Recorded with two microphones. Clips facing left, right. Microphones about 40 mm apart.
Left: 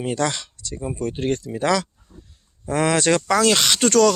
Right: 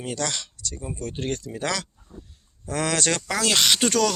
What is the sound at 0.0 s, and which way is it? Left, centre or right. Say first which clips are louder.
Speech: left 6 dB; left.